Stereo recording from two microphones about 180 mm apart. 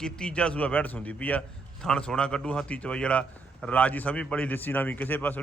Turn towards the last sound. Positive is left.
turn(degrees=10)  # may be behind; listen again after turning